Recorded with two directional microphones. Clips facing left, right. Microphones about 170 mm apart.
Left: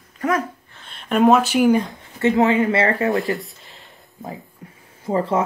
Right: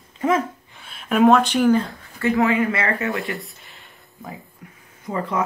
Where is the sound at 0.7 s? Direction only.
5° right (ahead or behind); by 3.2 s 30° left (ahead or behind).